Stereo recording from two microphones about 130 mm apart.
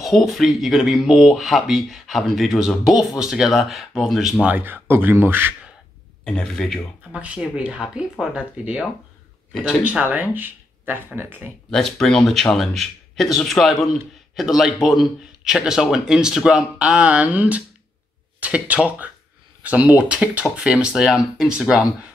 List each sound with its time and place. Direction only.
0.0 s speech: centre (ahead or behind)
6.2 s speech: 5° left (ahead or behind)
7.2 s speech: 10° right (ahead or behind)
9.8 s speech: 15° right (ahead or behind)
11.7 s speech: 5° left (ahead or behind)